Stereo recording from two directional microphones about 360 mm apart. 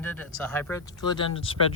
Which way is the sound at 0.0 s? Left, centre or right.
Centre.